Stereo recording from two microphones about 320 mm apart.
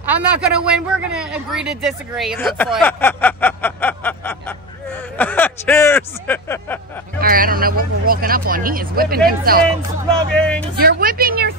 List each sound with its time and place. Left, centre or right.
0.0 s a man's voice: centre
7.2 s speech: right
10.3 s speech: centre
10.8 s speech: right